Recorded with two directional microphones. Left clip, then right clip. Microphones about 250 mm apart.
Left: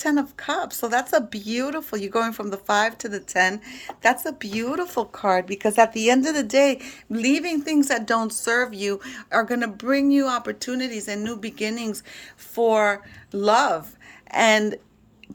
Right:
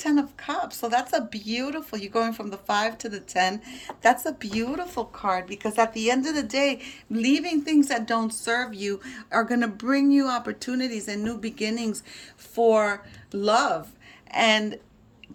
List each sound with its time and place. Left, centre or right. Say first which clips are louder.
0.0 s speech: left 2 dB; left
14.3 s speech: left 3 dB; left